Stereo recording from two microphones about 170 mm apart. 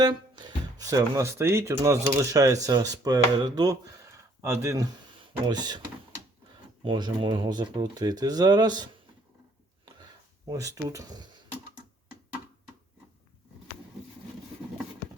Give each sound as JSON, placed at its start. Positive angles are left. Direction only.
{"t": 0.0, "sound": "speech", "side_deg": -25}
{"t": 6.8, "sound": "speech", "side_deg": -30}
{"t": 10.4, "sound": "speech", "side_deg": -20}